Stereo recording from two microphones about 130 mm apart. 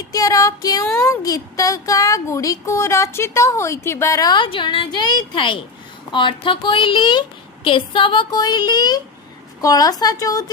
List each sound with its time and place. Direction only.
0.1 s a woman's voice: 25° left (ahead or behind)